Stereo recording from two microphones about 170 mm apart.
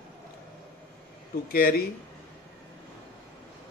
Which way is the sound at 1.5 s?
60° left (ahead or behind).